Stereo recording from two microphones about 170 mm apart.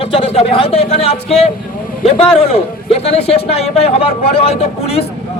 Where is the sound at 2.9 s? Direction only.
35° left (ahead or behind).